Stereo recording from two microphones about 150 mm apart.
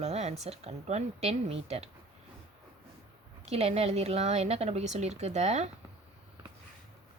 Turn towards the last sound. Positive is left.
turn(degrees=-50)  # may be behind; listen again after turning